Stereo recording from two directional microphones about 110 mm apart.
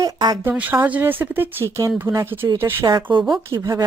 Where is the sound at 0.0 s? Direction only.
40° right (ahead or behind).